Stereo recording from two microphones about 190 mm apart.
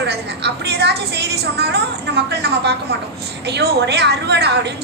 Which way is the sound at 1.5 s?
60° right (ahead or behind).